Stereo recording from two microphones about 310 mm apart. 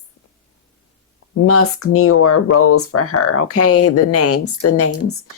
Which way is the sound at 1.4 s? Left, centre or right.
Left.